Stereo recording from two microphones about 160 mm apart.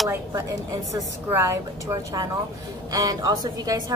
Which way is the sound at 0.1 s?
20° right (ahead or behind).